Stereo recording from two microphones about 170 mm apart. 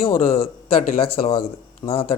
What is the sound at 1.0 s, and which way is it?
A man's voice, 35° left (ahead or behind).